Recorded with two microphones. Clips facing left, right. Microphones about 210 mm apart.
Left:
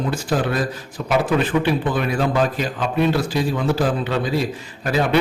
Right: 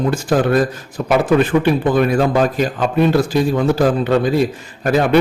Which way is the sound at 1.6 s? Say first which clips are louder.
Right 6 dB; 45° right (ahead or behind).